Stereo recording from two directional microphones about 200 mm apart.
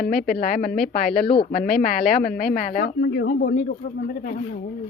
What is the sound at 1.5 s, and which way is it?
Speech, 45° left (ahead or behind).